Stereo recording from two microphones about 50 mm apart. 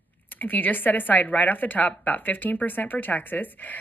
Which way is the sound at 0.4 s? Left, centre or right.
Left.